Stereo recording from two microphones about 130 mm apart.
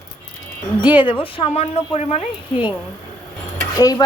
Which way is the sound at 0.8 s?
40° left (ahead or behind).